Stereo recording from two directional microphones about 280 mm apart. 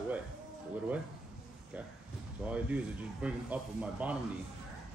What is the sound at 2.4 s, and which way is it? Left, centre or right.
Speech, centre.